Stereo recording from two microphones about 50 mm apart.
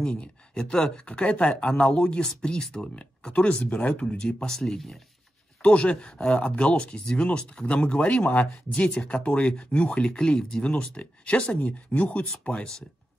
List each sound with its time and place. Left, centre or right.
0.0 s speech: left
4.0 s speech: centre
5.6 s speech: left
8.2 s speech: left
8.9 s speech: left